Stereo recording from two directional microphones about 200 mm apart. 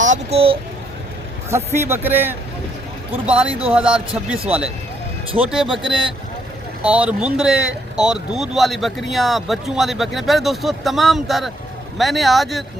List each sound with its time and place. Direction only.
0.0 s a child's voice: 35° right (ahead or behind)
1.5 s a man's voice: 10° right (ahead or behind)
3.8 s a man's voice: 5° right (ahead or behind)
5.6 s speech: 25° right (ahead or behind)
6.8 s a man's voice: 5° right (ahead or behind)